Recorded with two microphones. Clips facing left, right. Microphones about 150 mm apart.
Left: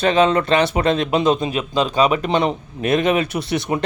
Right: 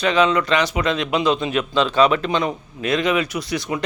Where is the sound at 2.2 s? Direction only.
30° left (ahead or behind).